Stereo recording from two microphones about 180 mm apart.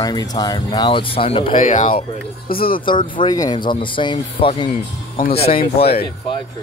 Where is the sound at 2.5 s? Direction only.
55° left (ahead or behind).